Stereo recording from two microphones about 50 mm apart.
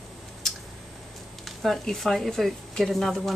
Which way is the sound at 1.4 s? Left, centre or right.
Centre.